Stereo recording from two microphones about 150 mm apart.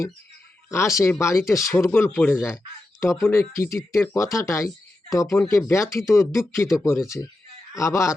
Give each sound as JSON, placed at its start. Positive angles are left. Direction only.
{"t": 0.7, "sound": "speech", "side_deg": 20}